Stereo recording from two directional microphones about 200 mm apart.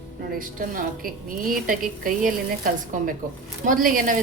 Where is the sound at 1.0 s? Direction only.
45° right (ahead or behind).